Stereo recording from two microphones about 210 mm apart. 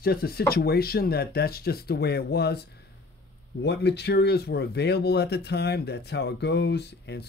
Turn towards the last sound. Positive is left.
turn(degrees=50)  # may be behind; listen again after turning